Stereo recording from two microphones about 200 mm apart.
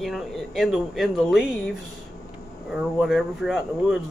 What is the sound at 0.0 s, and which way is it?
Speech, centre (ahead or behind).